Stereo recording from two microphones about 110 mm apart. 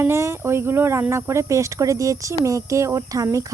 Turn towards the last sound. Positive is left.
turn(degrees=-30)  # may be behind; listen again after turning